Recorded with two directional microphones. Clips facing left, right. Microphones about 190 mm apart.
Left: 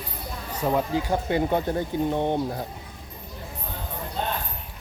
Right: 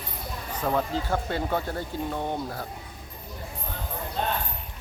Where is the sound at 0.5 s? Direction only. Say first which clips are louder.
Left 3 dB; 10° left (ahead or behind).